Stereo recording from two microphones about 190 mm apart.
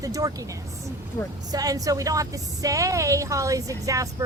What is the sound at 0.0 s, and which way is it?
Speech, 20° right (ahead or behind).